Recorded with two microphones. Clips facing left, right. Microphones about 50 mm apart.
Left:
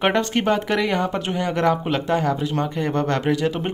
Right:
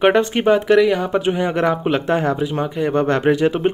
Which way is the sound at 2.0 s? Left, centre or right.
Right.